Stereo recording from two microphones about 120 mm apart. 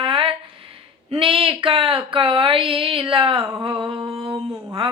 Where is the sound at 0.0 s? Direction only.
50° right (ahead or behind).